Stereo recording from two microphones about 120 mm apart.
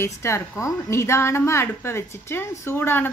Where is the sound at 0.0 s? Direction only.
25° left (ahead or behind).